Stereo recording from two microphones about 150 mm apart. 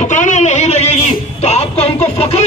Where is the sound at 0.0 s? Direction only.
55° left (ahead or behind).